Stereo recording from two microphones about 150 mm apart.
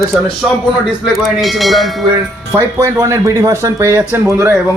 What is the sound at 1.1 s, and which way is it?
Speech, centre (ahead or behind).